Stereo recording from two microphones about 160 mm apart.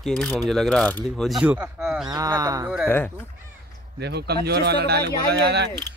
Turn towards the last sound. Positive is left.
turn(degrees=-90)